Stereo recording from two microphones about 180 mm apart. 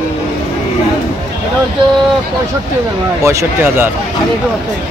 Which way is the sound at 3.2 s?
15° right (ahead or behind).